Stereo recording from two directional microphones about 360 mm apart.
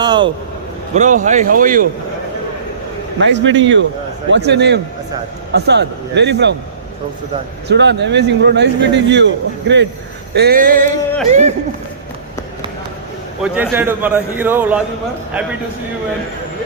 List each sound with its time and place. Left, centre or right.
0.0 s a sound: centre
0.9 s speech: centre
3.2 s a man's voice: right
7.7 s speech: right
13.4 s a man's voice: centre